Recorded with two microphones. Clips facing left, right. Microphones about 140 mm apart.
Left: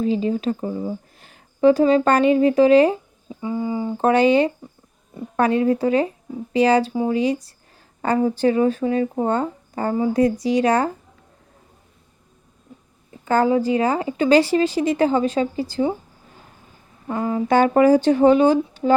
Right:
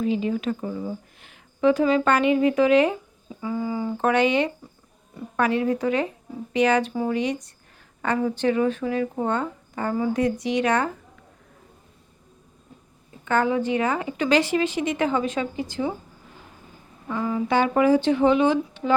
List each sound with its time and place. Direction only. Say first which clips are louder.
0.0 s speech: left 3 dB; 35° left (ahead or behind)
3.9 s a woman's voice: left 5 dB; 35° left (ahead or behind)
6.9 s speech: left 4 dB; 20° left (ahead or behind)
8.0 s a woman's voice: left 4 dB; 35° left (ahead or behind)
13.2 s a woman's voice: left 4 dB; 35° left (ahead or behind)
17.1 s a woman's voice: left 4 dB; 35° left (ahead or behind)